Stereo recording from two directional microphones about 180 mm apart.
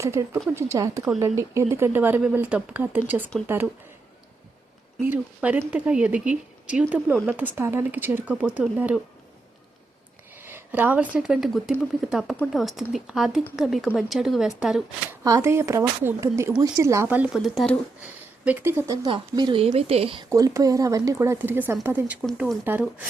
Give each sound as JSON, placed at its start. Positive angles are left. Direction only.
{"t": 0.0, "sound": "speech", "side_deg": -15}
{"t": 5.0, "sound": "speech", "side_deg": -10}
{"t": 10.3, "sound": "speech", "side_deg": -10}
{"t": 15.2, "sound": "speech", "side_deg": -15}
{"t": 19.1, "sound": "a woman's voice", "side_deg": -25}
{"t": 20.3, "sound": "speech", "side_deg": -20}
{"t": 22.6, "sound": "speech", "side_deg": -10}